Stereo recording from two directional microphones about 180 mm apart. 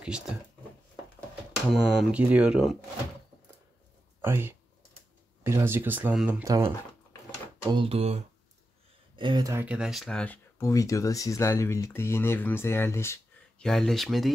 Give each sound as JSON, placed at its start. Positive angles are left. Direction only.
{"t": 1.7, "sound": "speech", "side_deg": 0}
{"t": 4.2, "sound": "speech", "side_deg": -10}
{"t": 6.4, "sound": "speech", "side_deg": -20}
{"t": 7.7, "sound": "speech", "side_deg": -30}
{"t": 13.7, "sound": "speech", "side_deg": 0}